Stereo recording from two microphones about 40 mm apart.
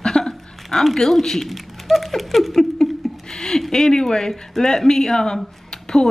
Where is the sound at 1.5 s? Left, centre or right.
Centre.